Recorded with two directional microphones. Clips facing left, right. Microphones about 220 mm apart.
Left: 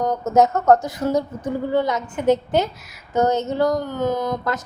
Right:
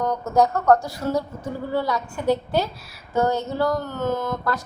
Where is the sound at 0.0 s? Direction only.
20° left (ahead or behind).